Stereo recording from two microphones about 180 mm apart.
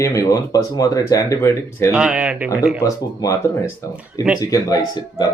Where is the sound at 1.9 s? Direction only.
5° right (ahead or behind).